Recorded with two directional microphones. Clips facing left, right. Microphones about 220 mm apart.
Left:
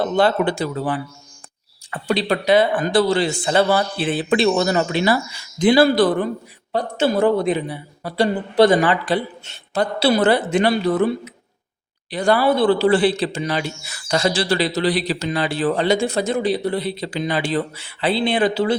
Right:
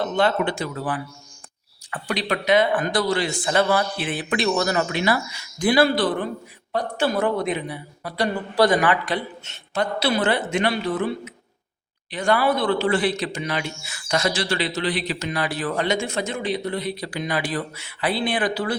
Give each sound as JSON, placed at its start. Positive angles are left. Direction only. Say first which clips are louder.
{"t": 0.0, "sound": "a man's voice", "louder": "left 4 dB", "side_deg": 35}
{"t": 5.8, "sound": "a man's voice", "louder": "left 5 dB", "side_deg": 40}
{"t": 6.7, "sound": "a man's voice", "louder": "left 4 dB", "side_deg": 25}
{"t": 12.1, "sound": "a man's voice", "louder": "left 4 dB", "side_deg": 35}